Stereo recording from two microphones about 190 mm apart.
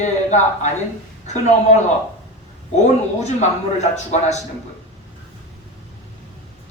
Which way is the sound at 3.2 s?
35° left (ahead or behind).